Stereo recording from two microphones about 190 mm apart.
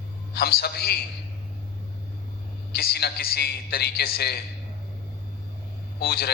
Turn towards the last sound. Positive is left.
turn(degrees=55)  # may be behind; listen again after turning